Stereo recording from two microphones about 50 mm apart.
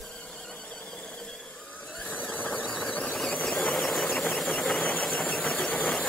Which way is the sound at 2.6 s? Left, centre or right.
Left.